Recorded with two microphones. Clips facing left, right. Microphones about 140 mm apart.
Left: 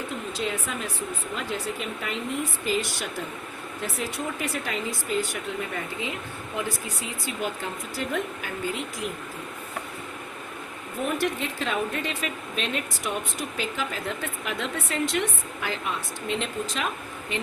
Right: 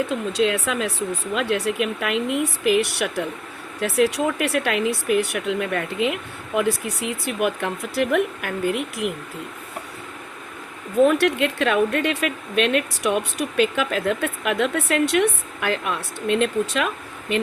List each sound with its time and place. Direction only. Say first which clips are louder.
0.1 s speech: right 9 dB; 85° right; by 9.1 s 65° right (ahead or behind)
11.0 s speech: right 10 dB; 75° right (ahead or behind)